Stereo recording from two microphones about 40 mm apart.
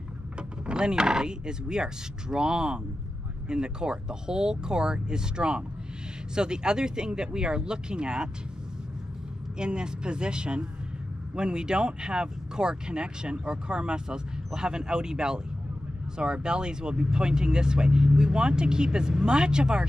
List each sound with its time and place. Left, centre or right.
0.4 s speech: right
9.6 s speech: right